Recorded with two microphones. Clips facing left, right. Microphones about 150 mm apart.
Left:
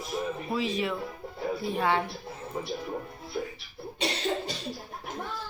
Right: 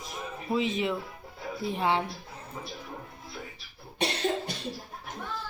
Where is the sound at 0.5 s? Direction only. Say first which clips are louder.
Right 3 dB; 20° right (ahead or behind).